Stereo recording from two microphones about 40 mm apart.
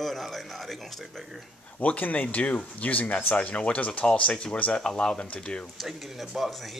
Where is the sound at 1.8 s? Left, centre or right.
Left.